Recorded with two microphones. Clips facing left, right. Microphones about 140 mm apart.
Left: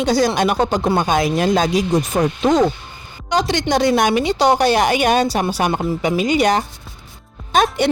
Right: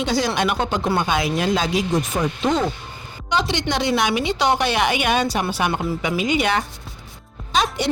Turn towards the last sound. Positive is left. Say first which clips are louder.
# left 5 dB
turn(degrees=50)  # may be behind; listen again after turning